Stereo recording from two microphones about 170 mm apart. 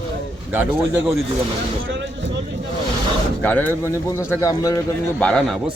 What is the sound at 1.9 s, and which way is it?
Speech, 90° right.